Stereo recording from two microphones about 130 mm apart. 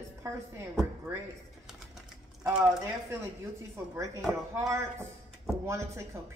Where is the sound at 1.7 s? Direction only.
5° right (ahead or behind).